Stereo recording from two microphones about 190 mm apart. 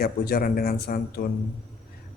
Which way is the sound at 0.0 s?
55° left (ahead or behind).